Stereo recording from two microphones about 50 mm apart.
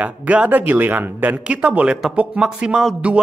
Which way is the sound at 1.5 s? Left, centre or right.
Right.